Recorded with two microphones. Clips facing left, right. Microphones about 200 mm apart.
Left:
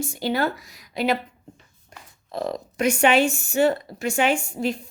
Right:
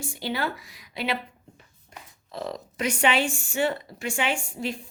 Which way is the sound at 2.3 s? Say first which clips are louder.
Left 5 dB; 50° left (ahead or behind).